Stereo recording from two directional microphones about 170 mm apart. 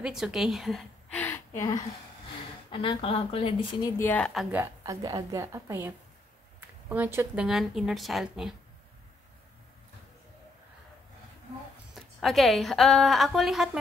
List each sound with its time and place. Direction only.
0.0 s a woman's voice: 5° right (ahead or behind); by 1.8 s 15° left (ahead or behind)
2.7 s speech: 30° left (ahead or behind)
4.0 s a woman's voice: 10° left (ahead or behind)
4.6 s a woman's voice: 20° right (ahead or behind); by 8.5 s centre (ahead or behind)
11.9 s a woman's voice: centre (ahead or behind)